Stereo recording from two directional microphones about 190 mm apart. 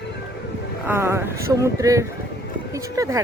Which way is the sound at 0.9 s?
15° right (ahead or behind).